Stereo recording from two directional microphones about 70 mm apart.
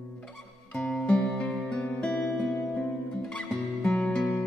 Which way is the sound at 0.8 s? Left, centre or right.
Centre.